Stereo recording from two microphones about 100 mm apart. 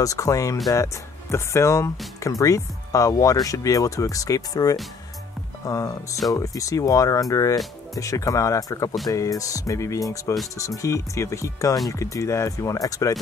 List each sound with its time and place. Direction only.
0.0 s speech: 35° left (ahead or behind)